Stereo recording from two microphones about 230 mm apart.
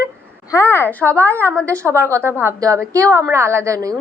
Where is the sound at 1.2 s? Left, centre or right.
Centre.